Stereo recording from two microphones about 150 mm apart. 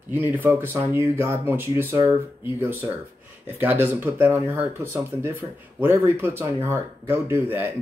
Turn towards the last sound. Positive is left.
turn(degrees=-15)  # may be behind; listen again after turning